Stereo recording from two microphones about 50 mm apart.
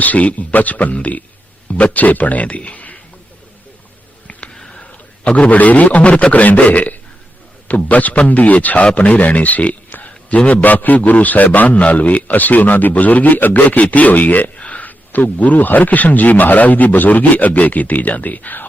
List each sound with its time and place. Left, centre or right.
0.0 s a man's voice: left
4.3 s a sound: left
5.2 s a man's voice: left